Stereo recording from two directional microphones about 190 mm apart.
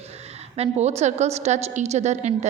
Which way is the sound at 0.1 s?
35° right (ahead or behind).